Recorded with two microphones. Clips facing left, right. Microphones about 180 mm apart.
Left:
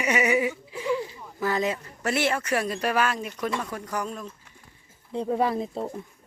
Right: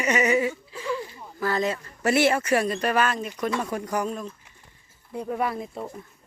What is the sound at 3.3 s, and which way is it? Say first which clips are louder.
Speech: right 3 dB; 5° right (ahead or behind).